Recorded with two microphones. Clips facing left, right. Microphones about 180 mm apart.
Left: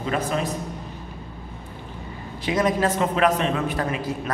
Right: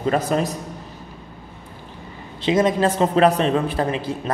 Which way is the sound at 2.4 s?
25° right (ahead or behind).